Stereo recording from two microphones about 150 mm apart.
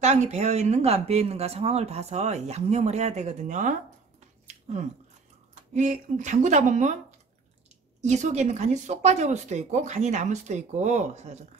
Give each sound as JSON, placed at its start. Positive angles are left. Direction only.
{"t": 0.0, "sound": "speech", "side_deg": -50}
{"t": 4.5, "sound": "a sound", "side_deg": -50}
{"t": 5.5, "sound": "speech", "side_deg": -55}